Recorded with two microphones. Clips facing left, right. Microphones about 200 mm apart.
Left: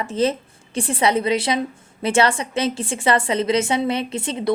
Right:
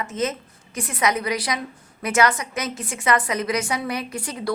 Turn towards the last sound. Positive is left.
turn(degrees=25)  # may be behind; listen again after turning